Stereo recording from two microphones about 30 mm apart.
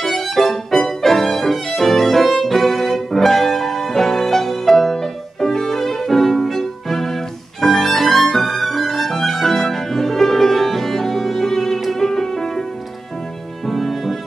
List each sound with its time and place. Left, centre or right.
0.0 s music: centre
13.7 s music: centre